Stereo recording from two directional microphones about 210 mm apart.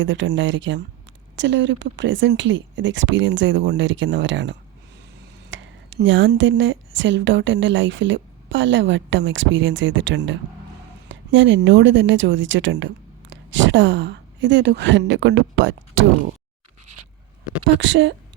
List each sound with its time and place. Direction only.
0.0 s a woman's voice: 65° right (ahead or behind)
17.7 s a woman's voice: 65° right (ahead or behind)